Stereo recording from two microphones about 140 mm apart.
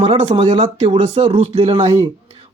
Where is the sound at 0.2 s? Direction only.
55° right (ahead or behind).